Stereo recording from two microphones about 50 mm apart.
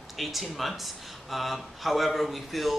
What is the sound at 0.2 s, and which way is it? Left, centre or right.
A man's voice, centre.